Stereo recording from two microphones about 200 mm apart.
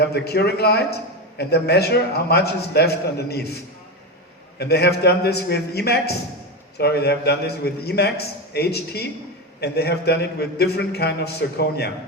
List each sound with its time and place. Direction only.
0.0 s a man's voice: 55° left (ahead or behind)